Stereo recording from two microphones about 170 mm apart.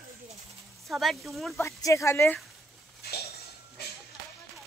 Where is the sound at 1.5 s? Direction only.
15° left (ahead or behind).